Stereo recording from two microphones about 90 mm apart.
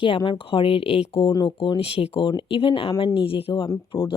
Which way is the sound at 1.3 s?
50° left (ahead or behind).